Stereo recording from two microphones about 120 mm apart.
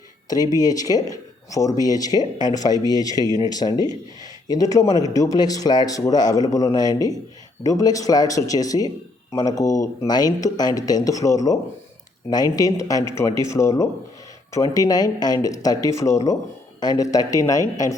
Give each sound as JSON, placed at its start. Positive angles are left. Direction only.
{"t": 0.5, "sound": "speech", "side_deg": 30}